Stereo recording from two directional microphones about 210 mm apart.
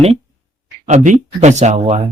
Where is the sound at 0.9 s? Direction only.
35° right (ahead or behind).